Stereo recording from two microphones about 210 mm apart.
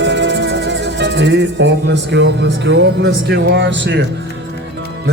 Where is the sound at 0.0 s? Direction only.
55° right (ahead or behind).